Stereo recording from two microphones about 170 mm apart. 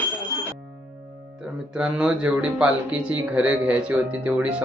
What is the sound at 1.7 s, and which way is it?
Speech, 5° right (ahead or behind).